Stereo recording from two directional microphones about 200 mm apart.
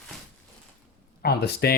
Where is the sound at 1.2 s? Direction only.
50° left (ahead or behind).